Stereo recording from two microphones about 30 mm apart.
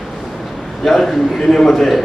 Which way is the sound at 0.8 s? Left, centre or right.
Centre.